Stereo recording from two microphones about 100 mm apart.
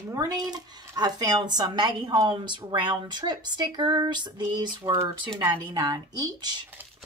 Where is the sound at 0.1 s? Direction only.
40° right (ahead or behind).